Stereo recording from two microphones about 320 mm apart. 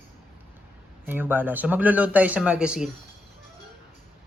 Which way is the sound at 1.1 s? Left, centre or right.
Centre.